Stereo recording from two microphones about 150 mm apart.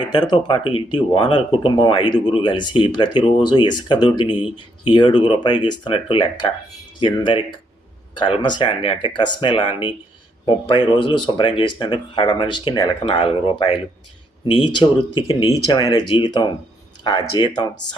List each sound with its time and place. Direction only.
0.0 s speech: 30° left (ahead or behind)
14.8 s speech: 35° left (ahead or behind)
15.5 s speech: 25° left (ahead or behind)